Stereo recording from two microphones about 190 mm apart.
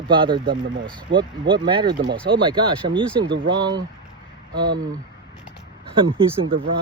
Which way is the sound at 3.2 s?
70° right (ahead or behind).